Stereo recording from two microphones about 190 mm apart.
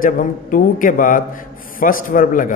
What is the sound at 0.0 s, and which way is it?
A man's voice, 45° left (ahead or behind).